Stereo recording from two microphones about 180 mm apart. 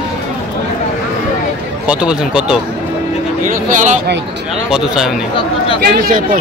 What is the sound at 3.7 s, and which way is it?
Speech, 45° right (ahead or behind).